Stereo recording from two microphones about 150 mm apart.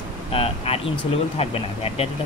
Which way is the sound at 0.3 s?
40° left (ahead or behind).